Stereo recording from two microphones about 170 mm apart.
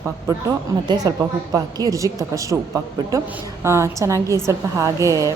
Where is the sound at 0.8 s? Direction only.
20° right (ahead or behind).